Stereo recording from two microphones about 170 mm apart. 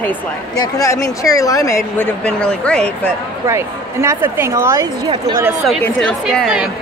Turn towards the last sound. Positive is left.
turn(degrees=0)  # may be behind; listen again after turning